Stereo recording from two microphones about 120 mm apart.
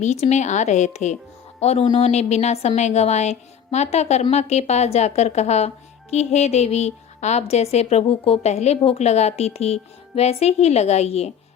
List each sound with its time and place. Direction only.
0.0 s a woman's voice: 70° left (ahead or behind)